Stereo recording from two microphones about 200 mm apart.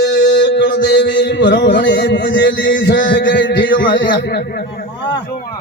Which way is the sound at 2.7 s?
60° left (ahead or behind).